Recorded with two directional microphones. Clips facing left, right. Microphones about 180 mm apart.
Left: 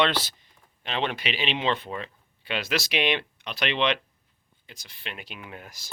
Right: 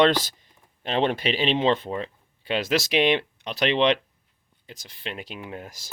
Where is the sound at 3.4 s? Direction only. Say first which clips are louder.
Right 6 dB; 25° right (ahead or behind).